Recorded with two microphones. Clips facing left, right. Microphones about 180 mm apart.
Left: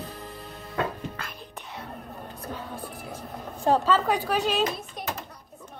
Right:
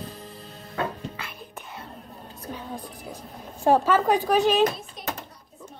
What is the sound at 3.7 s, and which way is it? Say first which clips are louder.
Speech: right 3 dB; 15° right (ahead or behind).